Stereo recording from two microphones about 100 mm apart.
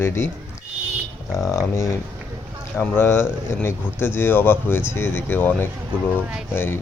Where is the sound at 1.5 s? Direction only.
30° left (ahead or behind).